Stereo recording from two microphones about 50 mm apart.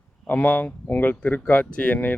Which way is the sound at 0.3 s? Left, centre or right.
Left.